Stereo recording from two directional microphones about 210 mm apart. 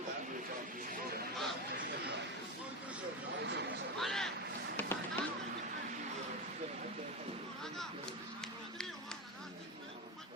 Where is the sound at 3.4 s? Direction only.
55° right (ahead or behind).